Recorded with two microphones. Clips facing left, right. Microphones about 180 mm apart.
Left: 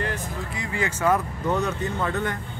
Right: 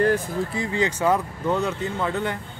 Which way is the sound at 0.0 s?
35° right (ahead or behind).